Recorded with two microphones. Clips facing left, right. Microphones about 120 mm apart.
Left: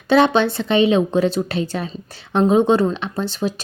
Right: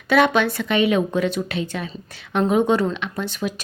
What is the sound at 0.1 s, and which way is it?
Speech, 30° left (ahead or behind).